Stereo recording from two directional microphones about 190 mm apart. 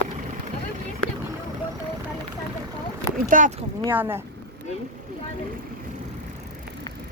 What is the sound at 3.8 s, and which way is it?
Speech, 10° right (ahead or behind).